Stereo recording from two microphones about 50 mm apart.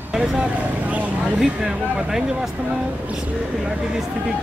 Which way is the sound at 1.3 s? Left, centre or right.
Centre.